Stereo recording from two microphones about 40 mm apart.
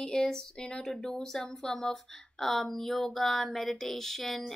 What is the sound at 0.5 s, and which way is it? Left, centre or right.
Speech, left.